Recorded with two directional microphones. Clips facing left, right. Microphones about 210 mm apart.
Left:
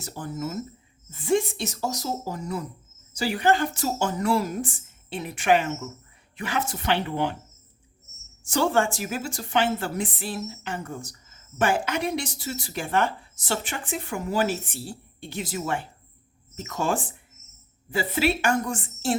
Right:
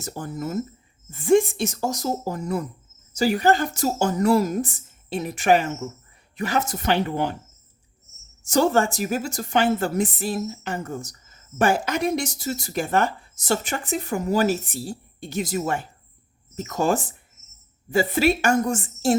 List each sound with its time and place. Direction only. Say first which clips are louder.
0.0 s speech: right 2 dB; 45° right (ahead or behind)
8.4 s speech: right 3 dB; 40° right (ahead or behind)